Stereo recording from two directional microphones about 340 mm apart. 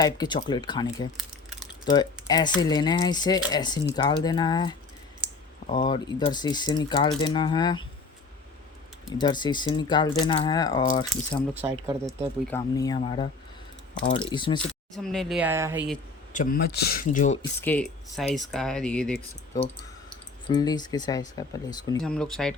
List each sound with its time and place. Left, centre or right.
0.0 s speech: centre
1.1 s typing: centre
1.8 s speech: centre
9.1 s speech: centre
11.5 s speech: centre
12.5 s speech: centre
14.6 s speech: centre
16.3 s speech: left
17.6 s speech: centre
20.5 s speech: centre